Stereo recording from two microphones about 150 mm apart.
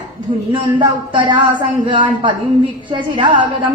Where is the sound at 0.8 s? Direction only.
30° right (ahead or behind).